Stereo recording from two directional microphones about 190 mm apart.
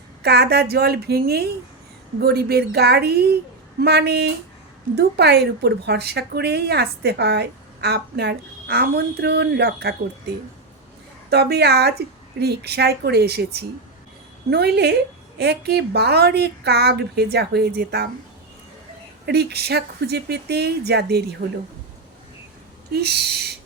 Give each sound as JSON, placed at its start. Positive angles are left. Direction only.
{"t": 0.2, "sound": "a woman's voice", "side_deg": -60}
{"t": 11.3, "sound": "a woman's voice", "side_deg": -60}
{"t": 19.2, "sound": "a woman's voice", "side_deg": -60}
{"t": 22.9, "sound": "a woman's voice", "side_deg": -60}